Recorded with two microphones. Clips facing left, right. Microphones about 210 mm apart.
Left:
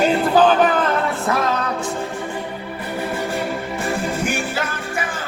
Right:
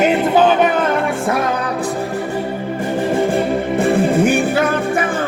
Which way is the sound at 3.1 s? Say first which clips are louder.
Right 9 dB; 50° right (ahead or behind).